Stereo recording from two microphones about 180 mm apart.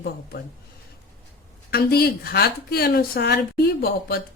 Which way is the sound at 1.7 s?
60° left (ahead or behind).